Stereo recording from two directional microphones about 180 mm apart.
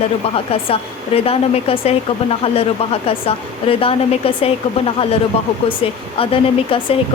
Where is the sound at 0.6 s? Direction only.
30° left (ahead or behind).